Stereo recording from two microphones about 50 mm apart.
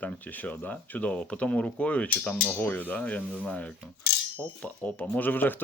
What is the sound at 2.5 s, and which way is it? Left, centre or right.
Speech, left.